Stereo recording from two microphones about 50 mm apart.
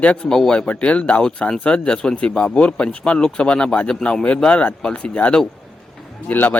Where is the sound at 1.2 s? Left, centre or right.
Centre.